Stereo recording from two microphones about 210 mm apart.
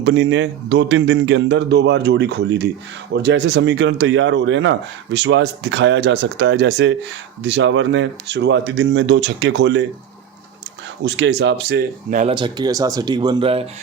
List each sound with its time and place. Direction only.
0.0 s speech: 60° right (ahead or behind)
11.0 s speech: 55° right (ahead or behind)
12.2 s speech: 20° right (ahead or behind)